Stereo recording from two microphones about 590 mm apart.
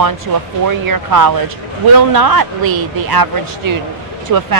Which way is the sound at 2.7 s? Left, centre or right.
Right.